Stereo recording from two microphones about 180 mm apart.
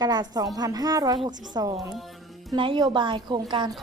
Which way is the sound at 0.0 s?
25° right (ahead or behind).